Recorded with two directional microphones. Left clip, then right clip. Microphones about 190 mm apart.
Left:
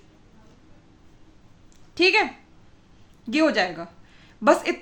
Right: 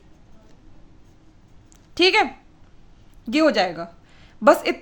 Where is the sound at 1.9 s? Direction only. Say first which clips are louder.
Right 2 dB; 40° right (ahead or behind).